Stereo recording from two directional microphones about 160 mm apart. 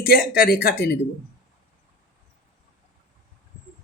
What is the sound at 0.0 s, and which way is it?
Speech, 70° left (ahead or behind).